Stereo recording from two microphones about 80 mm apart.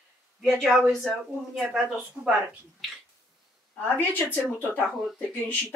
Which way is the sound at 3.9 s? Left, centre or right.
Left.